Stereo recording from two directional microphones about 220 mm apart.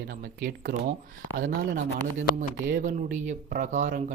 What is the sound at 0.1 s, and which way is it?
Speech, 40° right (ahead or behind).